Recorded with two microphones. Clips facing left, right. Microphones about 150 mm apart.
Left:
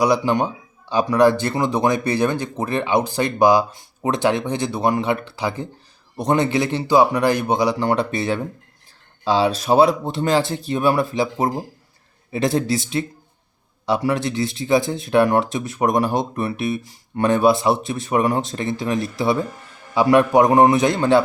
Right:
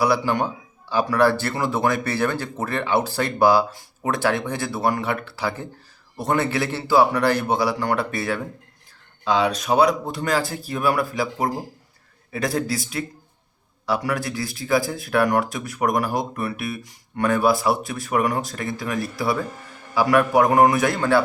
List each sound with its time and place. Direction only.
0.0 s speech: 20° left (ahead or behind)